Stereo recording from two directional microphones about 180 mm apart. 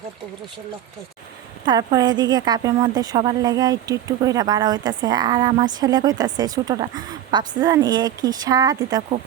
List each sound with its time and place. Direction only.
1.6 s a woman's voice: 20° right (ahead or behind)